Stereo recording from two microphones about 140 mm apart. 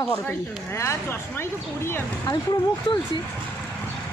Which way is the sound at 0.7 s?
20° left (ahead or behind).